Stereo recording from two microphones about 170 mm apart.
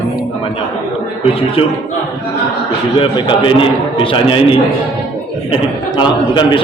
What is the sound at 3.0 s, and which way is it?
A man's voice, 30° left (ahead or behind).